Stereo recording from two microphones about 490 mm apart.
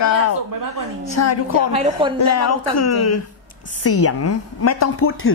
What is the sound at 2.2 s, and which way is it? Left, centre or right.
A woman's voice, left.